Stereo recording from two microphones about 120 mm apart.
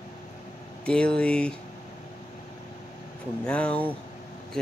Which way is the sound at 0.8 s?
10° left (ahead or behind).